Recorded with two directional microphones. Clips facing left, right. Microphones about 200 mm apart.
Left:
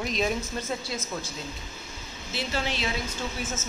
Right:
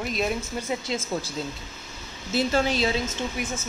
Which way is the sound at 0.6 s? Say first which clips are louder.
Right 4 dB; 20° right (ahead or behind).